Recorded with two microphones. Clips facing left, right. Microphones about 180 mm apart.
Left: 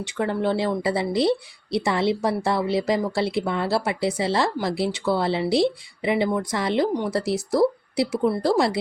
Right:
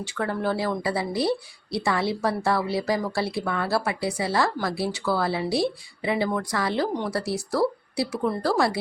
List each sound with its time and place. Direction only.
0.0 s speech: 20° left (ahead or behind)